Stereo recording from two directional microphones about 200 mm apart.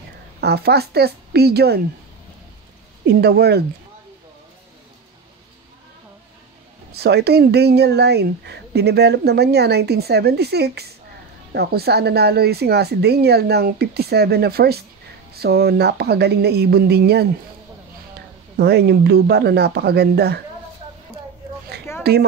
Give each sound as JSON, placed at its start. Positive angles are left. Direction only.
{"t": 0.4, "sound": "speech", "side_deg": -55}
{"t": 3.1, "sound": "speech", "side_deg": -55}
{"t": 6.9, "sound": "speech", "side_deg": -55}
{"t": 18.6, "sound": "speech", "side_deg": -55}
{"t": 21.9, "sound": "a sound", "side_deg": 15}